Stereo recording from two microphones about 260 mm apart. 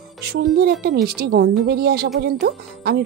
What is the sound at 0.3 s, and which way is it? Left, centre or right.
Speech, right.